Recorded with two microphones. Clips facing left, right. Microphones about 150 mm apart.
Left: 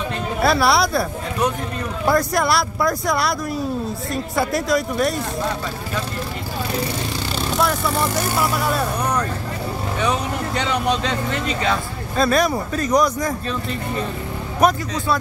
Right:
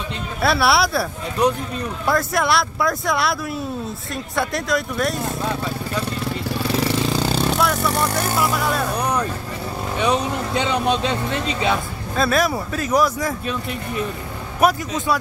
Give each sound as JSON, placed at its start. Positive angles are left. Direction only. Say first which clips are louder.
{"t": 0.4, "sound": "speech", "louder": "left 1 dB", "side_deg": 0}
{"t": 2.0, "sound": "speech", "louder": "left 2 dB", "side_deg": 0}
{"t": 7.6, "sound": "speech", "louder": "even", "side_deg": 0}
{"t": 9.9, "sound": "speech", "louder": "right 3 dB", "side_deg": -15}
{"t": 12.2, "sound": "speech", "louder": "left 1 dB", "side_deg": 0}
{"t": 14.6, "sound": "speech", "louder": "even", "side_deg": -5}